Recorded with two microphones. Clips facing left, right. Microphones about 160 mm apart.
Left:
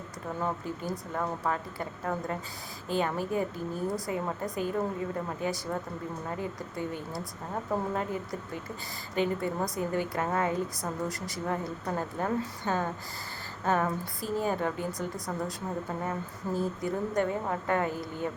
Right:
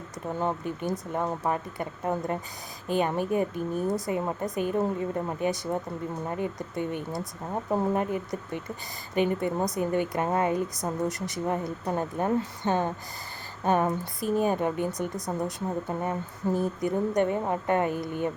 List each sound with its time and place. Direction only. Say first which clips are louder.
0.3 s a woman's voice: right 4 dB; 25° right (ahead or behind)